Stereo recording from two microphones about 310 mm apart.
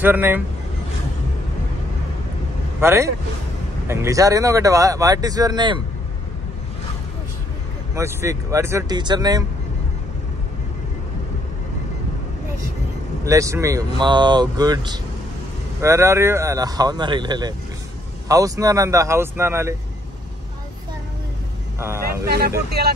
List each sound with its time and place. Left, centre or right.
0.0 s speech: centre
2.8 s speech: centre
7.9 s speech: centre
13.2 s speech: centre
21.7 s speech: centre
22.2 s speech: right